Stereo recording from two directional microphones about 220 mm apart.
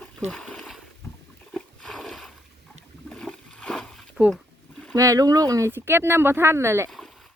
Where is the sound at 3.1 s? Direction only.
5° left (ahead or behind).